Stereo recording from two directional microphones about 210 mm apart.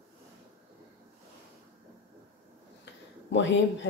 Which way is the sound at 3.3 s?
60° left (ahead or behind).